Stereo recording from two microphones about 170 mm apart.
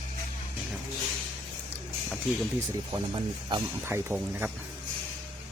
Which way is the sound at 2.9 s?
25° right (ahead or behind).